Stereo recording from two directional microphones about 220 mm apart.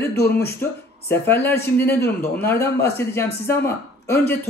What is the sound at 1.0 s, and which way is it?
Speech, 10° left (ahead or behind).